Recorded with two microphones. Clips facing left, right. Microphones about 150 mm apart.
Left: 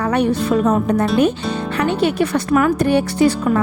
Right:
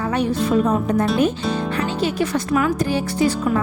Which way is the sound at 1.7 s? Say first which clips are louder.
Left 9 dB; 60° left (ahead or behind).